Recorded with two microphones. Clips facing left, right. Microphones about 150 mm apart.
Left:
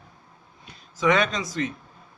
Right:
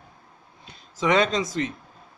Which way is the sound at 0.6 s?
25° right (ahead or behind).